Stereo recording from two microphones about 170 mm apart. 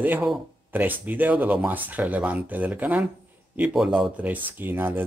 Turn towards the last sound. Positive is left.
turn(degrees=-10)  # may be behind; listen again after turning